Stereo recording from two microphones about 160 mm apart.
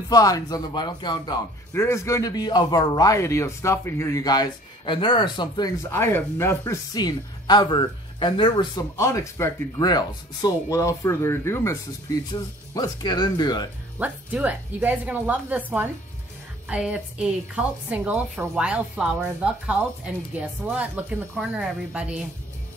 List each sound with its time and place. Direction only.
0.1 s a man's voice: 20° left (ahead or behind)
1.7 s a man's voice: 15° left (ahead or behind)
13.9 s a woman's voice: 10° right (ahead or behind)